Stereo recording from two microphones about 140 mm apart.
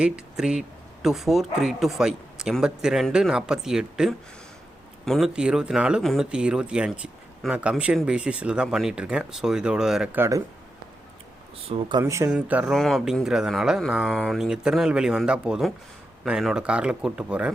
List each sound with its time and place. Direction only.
0.0 s speech: 5° right (ahead or behind)
10.2 s speech: 20° right (ahead or behind)
11.7 s speech: 35° right (ahead or behind)
12.0 s speech: 20° right (ahead or behind)
12.3 s speech: 10° right (ahead or behind)